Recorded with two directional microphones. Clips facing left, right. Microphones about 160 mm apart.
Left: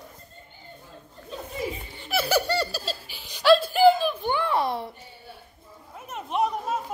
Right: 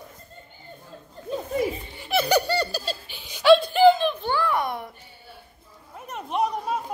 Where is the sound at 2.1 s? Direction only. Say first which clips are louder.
Right 2 dB; 5° left (ahead or behind); by 4.9 s 30° left (ahead or behind).